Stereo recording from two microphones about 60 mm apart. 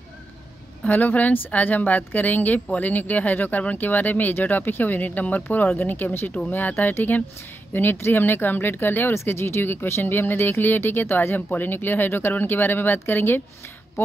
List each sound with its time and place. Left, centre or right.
0.8 s speech: left